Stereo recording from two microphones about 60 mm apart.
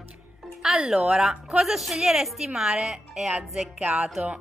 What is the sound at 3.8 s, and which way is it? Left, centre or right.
Speech, right.